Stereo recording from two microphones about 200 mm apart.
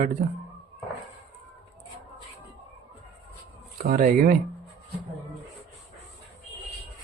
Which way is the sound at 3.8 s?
45° right (ahead or behind).